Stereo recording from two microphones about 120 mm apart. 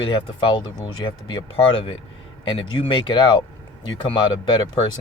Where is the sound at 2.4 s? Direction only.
50° left (ahead or behind).